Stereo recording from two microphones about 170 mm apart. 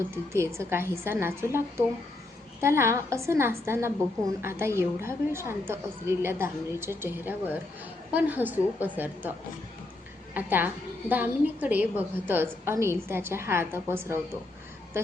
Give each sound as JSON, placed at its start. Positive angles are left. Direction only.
{"t": 0.1, "sound": "a woman's voice", "side_deg": -15}
{"t": 10.3, "sound": "a woman's voice", "side_deg": -10}